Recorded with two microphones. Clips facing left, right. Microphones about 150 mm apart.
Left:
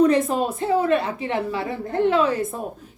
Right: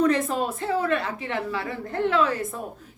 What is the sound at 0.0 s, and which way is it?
A woman's voice, 20° left (ahead or behind).